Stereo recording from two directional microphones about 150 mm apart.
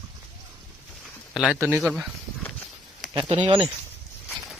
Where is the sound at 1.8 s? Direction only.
5° right (ahead or behind).